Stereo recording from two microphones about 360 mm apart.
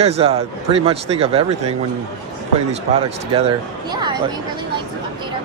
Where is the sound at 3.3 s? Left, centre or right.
Centre.